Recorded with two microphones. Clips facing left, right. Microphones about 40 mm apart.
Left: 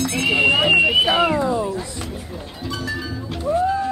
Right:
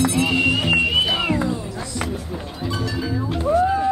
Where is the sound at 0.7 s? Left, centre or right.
Centre.